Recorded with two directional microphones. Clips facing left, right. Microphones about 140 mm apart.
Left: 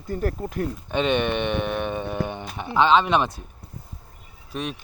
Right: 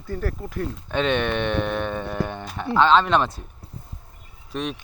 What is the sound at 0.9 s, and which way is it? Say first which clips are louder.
Speech: even; 10° left (ahead or behind).